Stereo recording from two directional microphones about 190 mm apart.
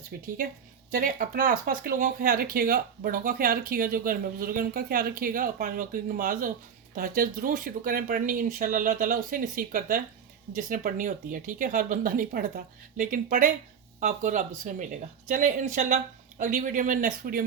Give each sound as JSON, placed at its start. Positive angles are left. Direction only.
{"t": 0.9, "sound": "speech", "side_deg": -50}